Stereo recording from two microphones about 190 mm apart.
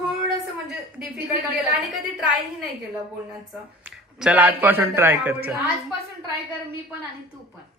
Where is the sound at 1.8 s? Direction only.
Centre (ahead or behind).